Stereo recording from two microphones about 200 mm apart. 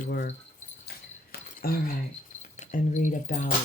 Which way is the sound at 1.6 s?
45° left (ahead or behind).